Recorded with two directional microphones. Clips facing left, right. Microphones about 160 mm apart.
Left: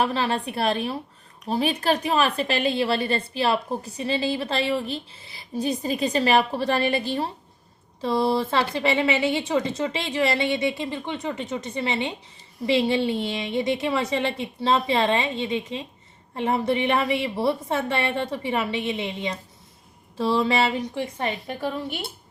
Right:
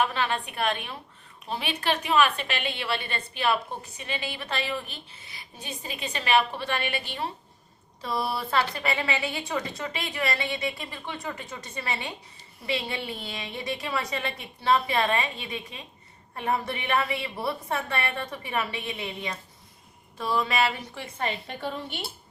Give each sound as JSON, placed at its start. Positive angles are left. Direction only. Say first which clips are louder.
{"t": 0.0, "sound": "a woman's voice", "louder": "left 3 dB", "side_deg": 35}
{"t": 8.0, "sound": "a woman's voice", "louder": "left 8 dB", "side_deg": 25}
{"t": 21.6, "sound": "speech", "louder": "left 7 dB", "side_deg": 5}